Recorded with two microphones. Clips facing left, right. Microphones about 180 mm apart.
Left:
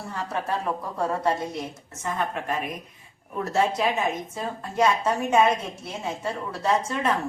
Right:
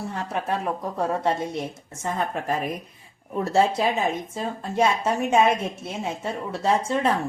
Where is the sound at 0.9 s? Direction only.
25° right (ahead or behind).